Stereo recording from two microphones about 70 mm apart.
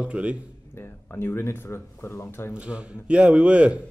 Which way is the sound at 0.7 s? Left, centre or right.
Left.